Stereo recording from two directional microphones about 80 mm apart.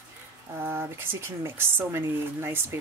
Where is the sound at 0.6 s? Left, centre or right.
Right.